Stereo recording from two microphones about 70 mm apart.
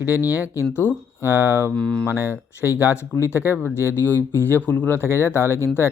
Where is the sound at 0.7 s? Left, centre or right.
Left.